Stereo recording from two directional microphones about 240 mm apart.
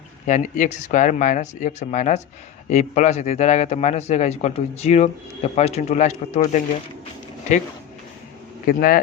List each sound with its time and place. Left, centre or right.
0.3 s a man's voice: left
8.6 s speech: left